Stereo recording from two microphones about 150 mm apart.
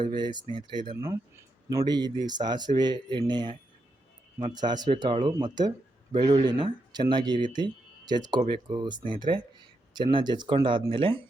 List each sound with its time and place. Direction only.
0.0 s speech: 30° right (ahead or behind)
0.9 s speech: 15° right (ahead or behind); by 11.2 s 35° right (ahead or behind)